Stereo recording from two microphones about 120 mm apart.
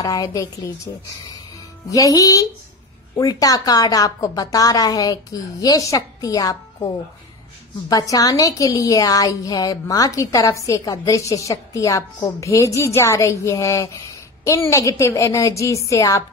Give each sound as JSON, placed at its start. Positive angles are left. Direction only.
{"t": 0.0, "sound": "a woman's voice", "side_deg": 30}
{"t": 1.9, "sound": "a woman's voice", "side_deg": 30}
{"t": 7.9, "sound": "a woman's voice", "side_deg": 30}